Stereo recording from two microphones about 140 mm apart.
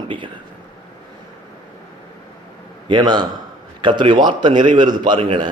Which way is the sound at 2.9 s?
30° right (ahead or behind).